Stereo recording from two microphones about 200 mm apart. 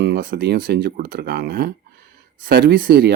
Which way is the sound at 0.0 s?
55° right (ahead or behind).